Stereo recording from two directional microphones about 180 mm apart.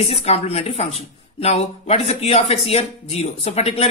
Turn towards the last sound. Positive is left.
turn(degrees=35)  # may be behind; listen again after turning